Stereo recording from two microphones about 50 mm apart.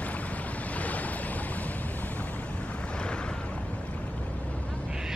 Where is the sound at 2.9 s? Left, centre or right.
Centre.